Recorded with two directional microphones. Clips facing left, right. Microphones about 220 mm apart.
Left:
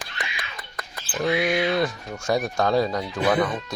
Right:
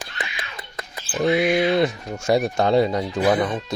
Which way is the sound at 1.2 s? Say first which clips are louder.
Right 4 dB; 25° right (ahead or behind).